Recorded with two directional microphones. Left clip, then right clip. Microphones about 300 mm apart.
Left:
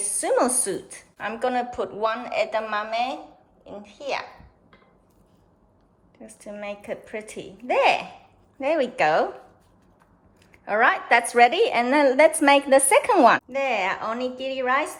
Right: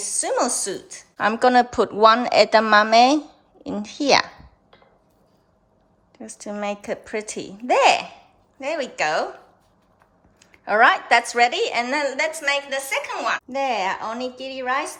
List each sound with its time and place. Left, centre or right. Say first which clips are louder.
0.0 s a woman's voice: even; centre
6.1 s a woman's voice: right 6 dB; centre
10.4 s a woman's voice: right 4 dB; centre
13.5 s a woman's voice: right 1 dB; centre